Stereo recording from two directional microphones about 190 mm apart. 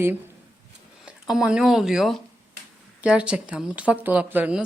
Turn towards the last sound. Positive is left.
turn(degrees=-10)  # may be behind; listen again after turning